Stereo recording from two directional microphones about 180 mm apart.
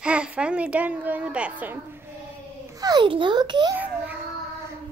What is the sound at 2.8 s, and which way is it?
Speech, 25° right (ahead or behind).